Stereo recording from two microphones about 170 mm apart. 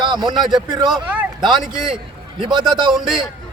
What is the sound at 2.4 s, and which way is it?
Speech, 25° right (ahead or behind).